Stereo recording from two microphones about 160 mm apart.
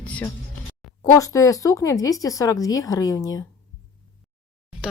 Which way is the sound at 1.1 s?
20° left (ahead or behind).